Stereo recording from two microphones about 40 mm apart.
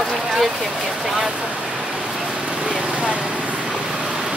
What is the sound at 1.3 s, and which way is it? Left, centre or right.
Speech, right.